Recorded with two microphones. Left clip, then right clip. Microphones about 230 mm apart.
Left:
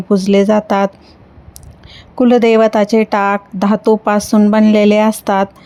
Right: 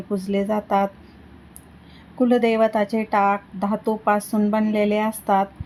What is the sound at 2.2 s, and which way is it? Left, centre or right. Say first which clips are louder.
A woman's voice: left 9 dB; left.